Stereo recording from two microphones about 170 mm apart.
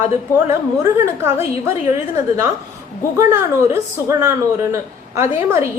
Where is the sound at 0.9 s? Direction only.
15° right (ahead or behind).